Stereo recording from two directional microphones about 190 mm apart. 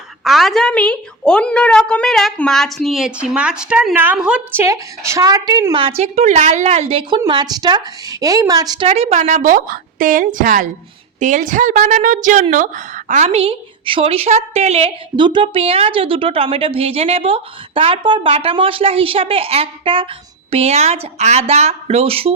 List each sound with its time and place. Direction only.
0.3 s a woman's voice: centre (ahead or behind); by 8.9 s 20° right (ahead or behind)
8.9 s a woman's voice: 40° right (ahead or behind)